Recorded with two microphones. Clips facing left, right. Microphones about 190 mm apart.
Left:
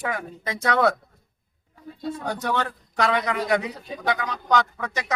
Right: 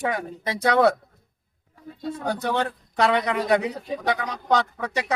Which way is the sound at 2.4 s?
30° right (ahead or behind).